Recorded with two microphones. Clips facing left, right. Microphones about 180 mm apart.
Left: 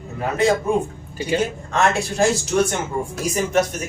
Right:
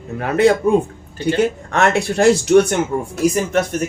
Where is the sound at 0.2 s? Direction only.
65° right (ahead or behind).